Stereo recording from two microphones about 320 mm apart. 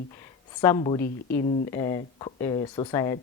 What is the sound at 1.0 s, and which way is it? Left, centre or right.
Speech, left.